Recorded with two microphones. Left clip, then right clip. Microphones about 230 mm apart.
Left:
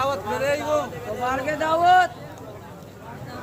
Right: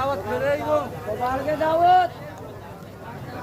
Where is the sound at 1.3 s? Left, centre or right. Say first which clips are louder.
Even; left.